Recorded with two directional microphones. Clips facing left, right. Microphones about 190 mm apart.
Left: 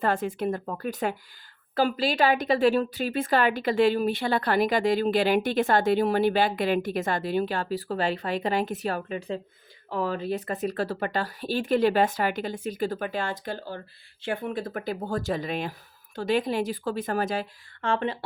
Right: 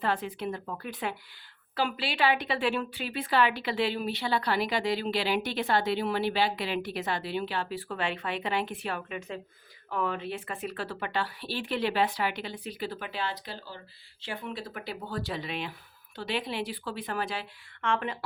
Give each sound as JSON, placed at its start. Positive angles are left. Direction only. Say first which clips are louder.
{"t": 0.0, "sound": "a woman's voice", "louder": "left 5 dB", "side_deg": 45}
{"t": 17.8, "sound": "speech", "louder": "left 4 dB", "side_deg": 30}